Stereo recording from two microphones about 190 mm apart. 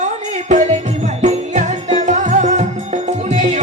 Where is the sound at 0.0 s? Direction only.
40° right (ahead or behind).